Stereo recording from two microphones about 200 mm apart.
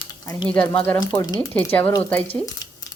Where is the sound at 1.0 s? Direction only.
20° left (ahead or behind).